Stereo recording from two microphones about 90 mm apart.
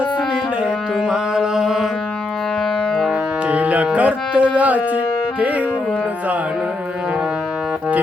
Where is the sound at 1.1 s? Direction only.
5° right (ahead or behind).